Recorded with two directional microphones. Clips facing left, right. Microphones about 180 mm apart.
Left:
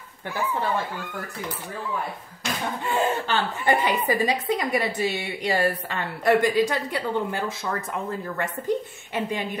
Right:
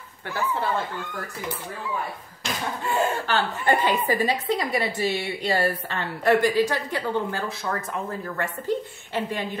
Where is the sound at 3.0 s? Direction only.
20° left (ahead or behind).